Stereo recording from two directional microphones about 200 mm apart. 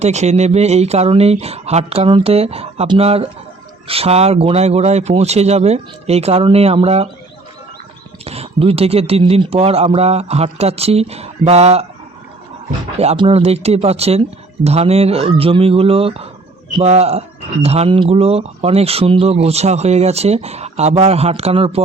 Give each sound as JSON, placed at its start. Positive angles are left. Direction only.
{"t": 0.0, "sound": "speech", "side_deg": -35}
{"t": 8.2, "sound": "speech", "side_deg": -30}
{"t": 13.0, "sound": "speech", "side_deg": -30}